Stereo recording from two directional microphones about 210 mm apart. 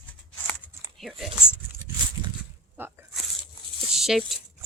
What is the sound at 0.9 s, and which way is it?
Speech, centre (ahead or behind).